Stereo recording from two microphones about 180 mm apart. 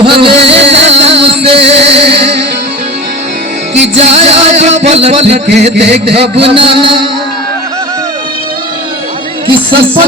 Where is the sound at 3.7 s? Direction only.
35° right (ahead or behind).